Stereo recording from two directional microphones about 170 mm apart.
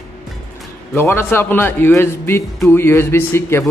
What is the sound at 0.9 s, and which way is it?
Speech, 15° left (ahead or behind).